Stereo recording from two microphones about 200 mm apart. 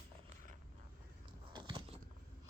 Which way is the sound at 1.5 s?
20° right (ahead or behind).